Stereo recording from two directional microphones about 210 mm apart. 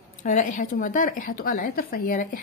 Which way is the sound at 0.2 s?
35° left (ahead or behind).